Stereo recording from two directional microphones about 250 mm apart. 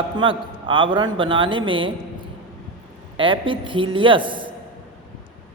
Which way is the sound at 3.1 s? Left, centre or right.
Right.